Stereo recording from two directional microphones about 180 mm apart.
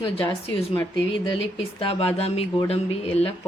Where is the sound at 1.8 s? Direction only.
30° left (ahead or behind).